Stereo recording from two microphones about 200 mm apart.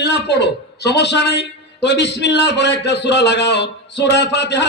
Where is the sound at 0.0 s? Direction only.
55° left (ahead or behind).